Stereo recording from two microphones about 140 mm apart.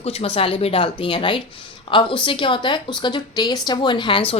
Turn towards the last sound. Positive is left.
turn(degrees=40)  # may be behind; listen again after turning